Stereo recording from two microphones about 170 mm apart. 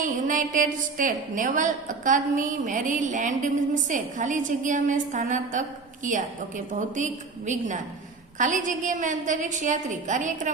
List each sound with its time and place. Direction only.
0.0 s a woman's voice: 50° right (ahead or behind)